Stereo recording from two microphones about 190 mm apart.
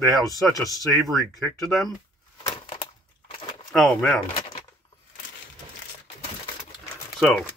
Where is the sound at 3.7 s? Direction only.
5° left (ahead or behind).